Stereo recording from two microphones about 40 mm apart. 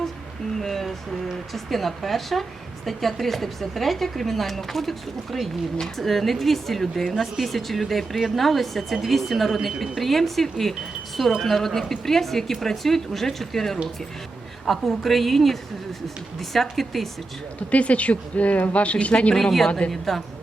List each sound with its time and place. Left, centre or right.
0.6 s a woman's voice: centre
17.7 s speech: left
19.5 s a woman's voice: centre